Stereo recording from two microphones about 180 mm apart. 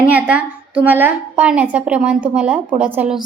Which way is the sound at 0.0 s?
10° right (ahead or behind).